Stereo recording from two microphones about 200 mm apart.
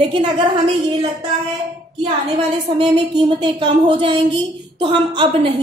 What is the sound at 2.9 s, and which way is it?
A woman's voice, 25° right (ahead or behind).